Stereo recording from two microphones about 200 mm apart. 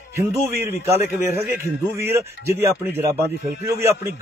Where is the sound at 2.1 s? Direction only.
15° right (ahead or behind).